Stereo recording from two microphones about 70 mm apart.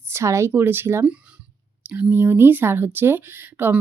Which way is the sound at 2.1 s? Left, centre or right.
Right.